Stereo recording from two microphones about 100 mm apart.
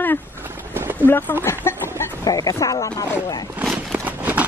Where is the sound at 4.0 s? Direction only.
15° right (ahead or behind).